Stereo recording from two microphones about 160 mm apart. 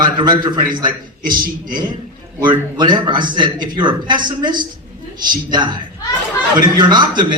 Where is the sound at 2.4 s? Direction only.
30° right (ahead or behind).